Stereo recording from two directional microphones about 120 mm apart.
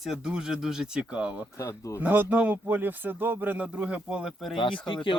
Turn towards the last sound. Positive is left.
turn(degrees=45)  # may be behind; listen again after turning